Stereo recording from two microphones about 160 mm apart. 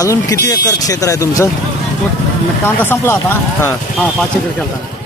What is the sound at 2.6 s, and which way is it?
Speech, 15° left (ahead or behind).